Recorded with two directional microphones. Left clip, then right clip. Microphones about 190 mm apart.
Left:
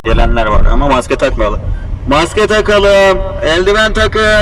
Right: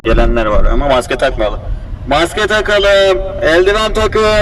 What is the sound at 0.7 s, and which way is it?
Speech, 10° left (ahead or behind).